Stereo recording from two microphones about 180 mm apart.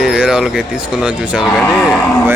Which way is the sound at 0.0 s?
5° right (ahead or behind).